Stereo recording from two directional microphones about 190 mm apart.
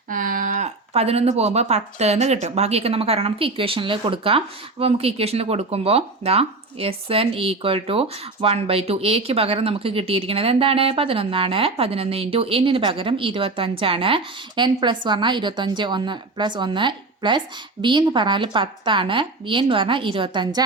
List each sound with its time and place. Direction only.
0.1 s speech: 45° right (ahead or behind); by 20.7 s 20° right (ahead or behind)